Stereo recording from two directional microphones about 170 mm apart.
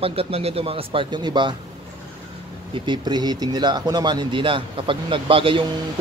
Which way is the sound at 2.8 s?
25° right (ahead or behind).